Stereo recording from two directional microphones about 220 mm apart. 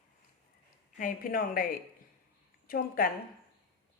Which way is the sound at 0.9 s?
40° left (ahead or behind).